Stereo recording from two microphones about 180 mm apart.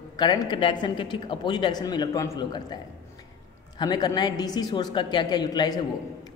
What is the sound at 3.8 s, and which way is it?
A man's voice, 20° left (ahead or behind).